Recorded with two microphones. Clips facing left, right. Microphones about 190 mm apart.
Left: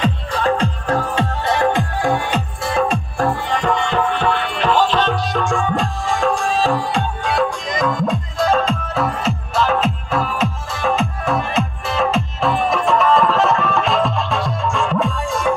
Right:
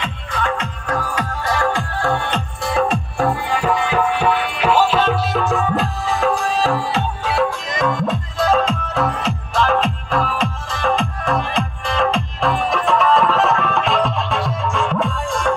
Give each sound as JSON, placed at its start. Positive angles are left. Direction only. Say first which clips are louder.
{"t": 0.0, "sound": "music", "louder": "left 5 dB", "side_deg": 35}